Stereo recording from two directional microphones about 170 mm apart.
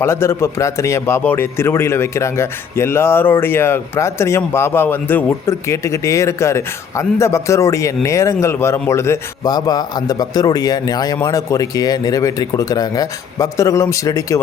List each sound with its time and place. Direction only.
0.0 s a man's voice: 15° left (ahead or behind)